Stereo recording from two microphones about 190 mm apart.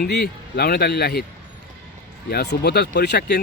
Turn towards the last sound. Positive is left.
turn(degrees=60)  # may be behind; listen again after turning